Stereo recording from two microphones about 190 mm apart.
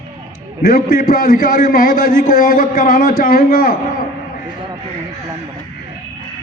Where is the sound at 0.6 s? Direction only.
50° left (ahead or behind).